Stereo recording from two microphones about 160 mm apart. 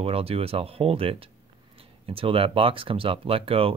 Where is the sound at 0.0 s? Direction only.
35° right (ahead or behind).